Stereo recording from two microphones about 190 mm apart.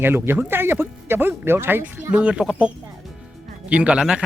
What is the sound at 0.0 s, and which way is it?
Speech, 10° right (ahead or behind).